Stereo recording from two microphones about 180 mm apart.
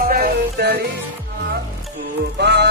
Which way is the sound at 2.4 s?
70° right (ahead or behind).